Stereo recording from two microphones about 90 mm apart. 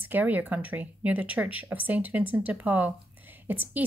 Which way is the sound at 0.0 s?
20° right (ahead or behind).